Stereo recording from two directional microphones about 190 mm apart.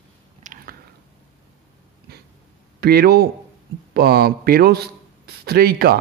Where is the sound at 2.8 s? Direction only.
55° right (ahead or behind).